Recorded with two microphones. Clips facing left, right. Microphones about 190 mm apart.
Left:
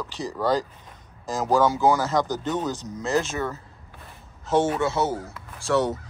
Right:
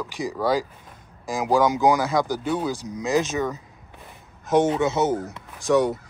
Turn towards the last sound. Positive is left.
turn(degrees=-15)  # may be behind; listen again after turning